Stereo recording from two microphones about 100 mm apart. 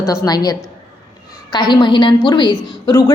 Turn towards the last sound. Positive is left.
turn(degrees=40)  # may be behind; listen again after turning